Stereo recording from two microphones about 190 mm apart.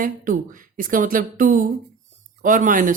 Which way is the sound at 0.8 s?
45° right (ahead or behind).